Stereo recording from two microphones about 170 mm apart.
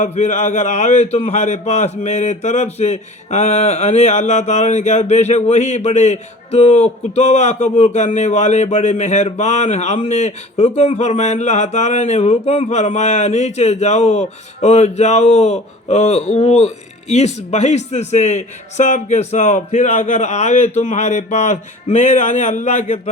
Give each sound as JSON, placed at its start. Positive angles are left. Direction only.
{"t": 0.0, "sound": "a man's voice", "side_deg": 45}